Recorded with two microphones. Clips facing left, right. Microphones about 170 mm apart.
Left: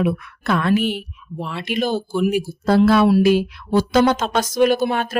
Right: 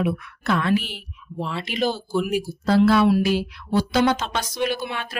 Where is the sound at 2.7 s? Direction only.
50° left (ahead or behind).